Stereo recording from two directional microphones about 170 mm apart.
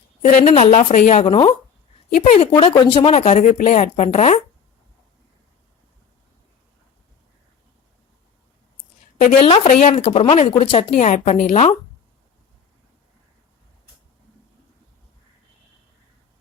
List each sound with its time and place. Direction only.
0.3 s speech: 35° left (ahead or behind)
9.1 s speech: 40° left (ahead or behind)